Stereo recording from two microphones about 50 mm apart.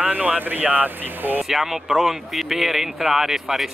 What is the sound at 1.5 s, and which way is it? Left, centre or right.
Speech, centre.